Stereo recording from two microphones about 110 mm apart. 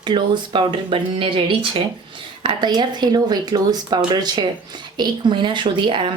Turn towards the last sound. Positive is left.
turn(degrees=-50)  # may be behind; listen again after turning